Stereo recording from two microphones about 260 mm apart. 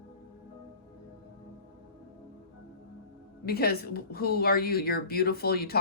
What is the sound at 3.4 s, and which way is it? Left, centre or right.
A woman's voice, left.